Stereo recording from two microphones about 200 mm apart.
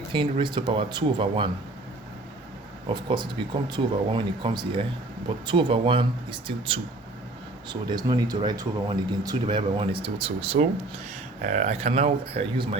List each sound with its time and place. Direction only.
0.1 s speech: 25° right (ahead or behind)
2.9 s speech: 25° right (ahead or behind)